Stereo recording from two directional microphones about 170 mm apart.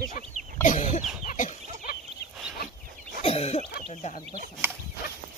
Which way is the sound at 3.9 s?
40° left (ahead or behind).